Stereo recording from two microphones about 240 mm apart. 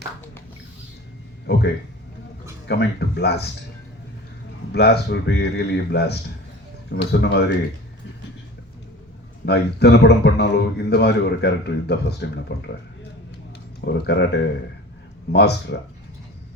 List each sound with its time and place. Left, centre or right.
1.5 s a man's voice: left
2.6 s a man's voice: left
4.7 s a man's voice: left
9.5 s a man's voice: left
13.8 s a man's voice: left